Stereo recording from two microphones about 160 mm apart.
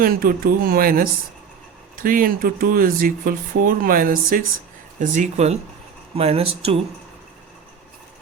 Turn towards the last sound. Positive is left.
turn(degrees=-40)  # may be behind; listen again after turning